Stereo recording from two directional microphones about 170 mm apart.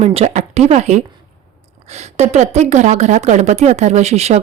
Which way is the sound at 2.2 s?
40° right (ahead or behind).